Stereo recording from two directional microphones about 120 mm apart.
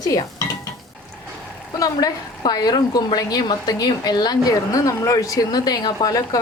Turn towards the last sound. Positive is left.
turn(degrees=30)  # may be behind; listen again after turning